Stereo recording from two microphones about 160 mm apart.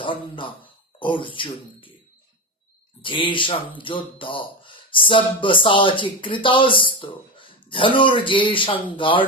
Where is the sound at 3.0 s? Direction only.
30° left (ahead or behind).